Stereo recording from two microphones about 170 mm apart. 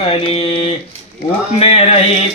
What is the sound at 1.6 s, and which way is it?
Music, 35° left (ahead or behind).